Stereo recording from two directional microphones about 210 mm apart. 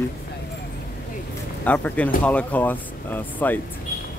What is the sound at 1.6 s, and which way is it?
Speech, 10° left (ahead or behind).